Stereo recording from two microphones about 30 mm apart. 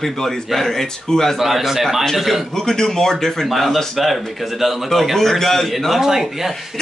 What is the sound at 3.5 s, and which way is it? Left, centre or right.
Speech, centre.